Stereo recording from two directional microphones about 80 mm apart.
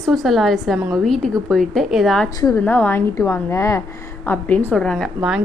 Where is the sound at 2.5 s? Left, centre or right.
Left.